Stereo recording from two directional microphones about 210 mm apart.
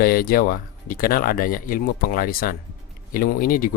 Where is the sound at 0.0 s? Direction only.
45° left (ahead or behind).